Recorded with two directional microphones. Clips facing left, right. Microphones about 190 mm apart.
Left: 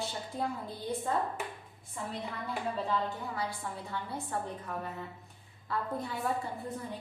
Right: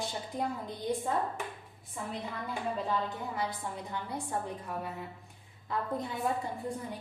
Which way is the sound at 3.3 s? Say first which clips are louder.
Right 1 dB; 15° right (ahead or behind).